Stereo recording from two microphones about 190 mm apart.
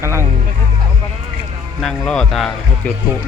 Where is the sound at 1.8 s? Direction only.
5° left (ahead or behind).